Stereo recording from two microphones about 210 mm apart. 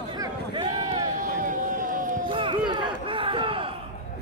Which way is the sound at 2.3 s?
25° right (ahead or behind).